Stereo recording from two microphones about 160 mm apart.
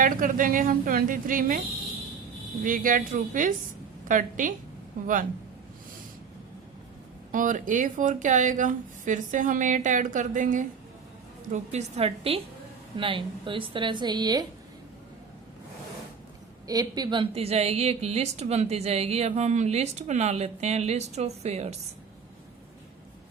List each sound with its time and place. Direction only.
0.0 s a woman's voice: 60° right (ahead or behind)
2.6 s a woman's voice: 60° right (ahead or behind)
7.3 s speech: 55° right (ahead or behind)
11.5 s a woman's voice: 45° right (ahead or behind); by 14.4 s 25° right (ahead or behind)
16.6 s a woman's voice: 25° right (ahead or behind); by 21.8 s 45° right (ahead or behind)